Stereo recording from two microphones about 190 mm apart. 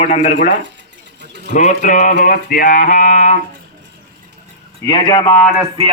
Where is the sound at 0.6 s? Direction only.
65° right (ahead or behind).